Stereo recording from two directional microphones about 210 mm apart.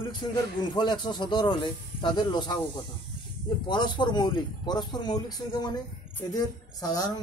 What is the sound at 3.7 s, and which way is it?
Speech, 20° left (ahead or behind).